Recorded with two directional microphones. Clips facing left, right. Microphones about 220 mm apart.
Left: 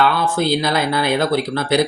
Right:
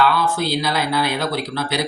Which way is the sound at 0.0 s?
50° left (ahead or behind).